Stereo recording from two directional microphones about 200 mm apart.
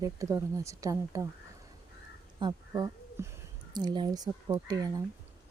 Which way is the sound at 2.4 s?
20° right (ahead or behind).